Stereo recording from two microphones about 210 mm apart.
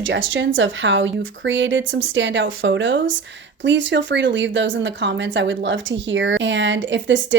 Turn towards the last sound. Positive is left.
turn(degrees=-60)  # may be behind; listen again after turning